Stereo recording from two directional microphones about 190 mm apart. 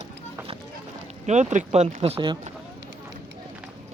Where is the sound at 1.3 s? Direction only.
40° right (ahead or behind).